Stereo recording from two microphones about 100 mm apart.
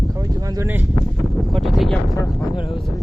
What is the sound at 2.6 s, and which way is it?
Speech, 55° left (ahead or behind).